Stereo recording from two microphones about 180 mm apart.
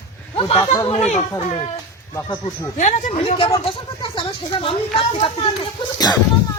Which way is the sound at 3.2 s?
30° left (ahead or behind).